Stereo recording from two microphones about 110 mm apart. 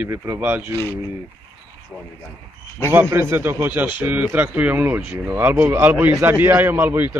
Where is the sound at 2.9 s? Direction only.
20° right (ahead or behind).